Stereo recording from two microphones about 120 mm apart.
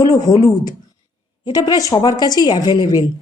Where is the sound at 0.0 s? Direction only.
30° left (ahead or behind).